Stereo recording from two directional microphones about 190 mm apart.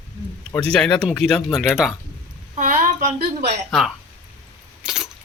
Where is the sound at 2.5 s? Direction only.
45° right (ahead or behind).